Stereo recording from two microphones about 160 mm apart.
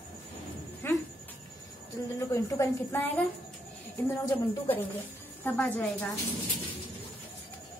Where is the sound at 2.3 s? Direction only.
20° left (ahead or behind).